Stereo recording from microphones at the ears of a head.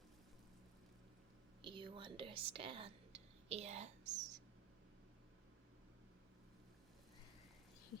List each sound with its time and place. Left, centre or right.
1.6 s a woman's voice: right